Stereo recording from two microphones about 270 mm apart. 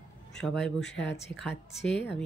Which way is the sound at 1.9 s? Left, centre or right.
Left.